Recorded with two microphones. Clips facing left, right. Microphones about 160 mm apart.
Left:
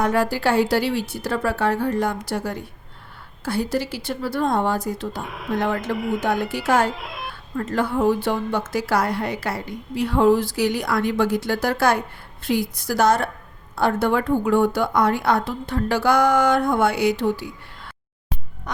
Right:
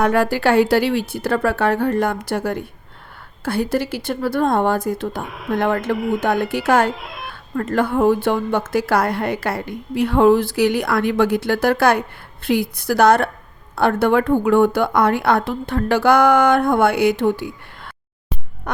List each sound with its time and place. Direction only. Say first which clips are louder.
0.0 s a woman's voice: right 3 dB; 60° right (ahead or behind)
5.2 s speech: right 2 dB; centre (ahead or behind)
5.5 s a woman's voice: right 4 dB; 55° right (ahead or behind)
6.9 s speech: even; centre (ahead or behind)
7.5 s a woman's voice: right 4 dB; 55° right (ahead or behind)